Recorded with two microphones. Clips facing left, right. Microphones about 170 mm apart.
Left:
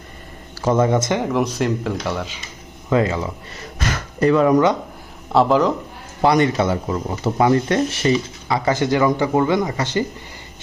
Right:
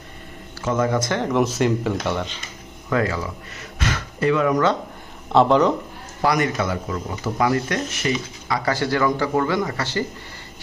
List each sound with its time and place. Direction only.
0.6 s speech: 30° left (ahead or behind)
1.2 s speech: centre (ahead or behind)
2.9 s speech: 20° left (ahead or behind)
3.8 s a sound: 40° left (ahead or behind)
5.3 s speech: centre (ahead or behind)
6.2 s speech: 25° left (ahead or behind)